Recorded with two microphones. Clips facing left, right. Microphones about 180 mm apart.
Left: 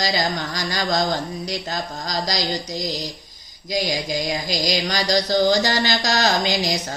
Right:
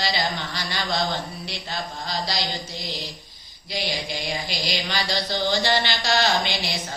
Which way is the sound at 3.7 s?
40° left (ahead or behind).